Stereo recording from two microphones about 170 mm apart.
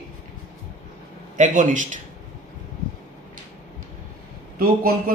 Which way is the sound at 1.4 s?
50° right (ahead or behind).